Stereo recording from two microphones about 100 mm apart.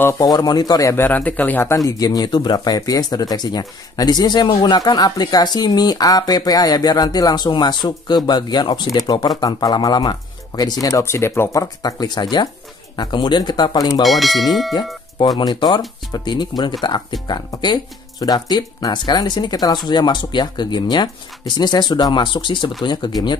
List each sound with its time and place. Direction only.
0.2 s speech: 40° left (ahead or behind)
0.9 s speech: 20° left (ahead or behind)
1.9 s speech: 40° left (ahead or behind)
11.6 s speech: 40° left (ahead or behind)
14.0 s speech: centre (ahead or behind)
15.3 s speech: 50° left (ahead or behind)